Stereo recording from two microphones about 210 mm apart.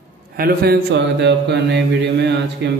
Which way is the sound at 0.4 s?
45° right (ahead or behind).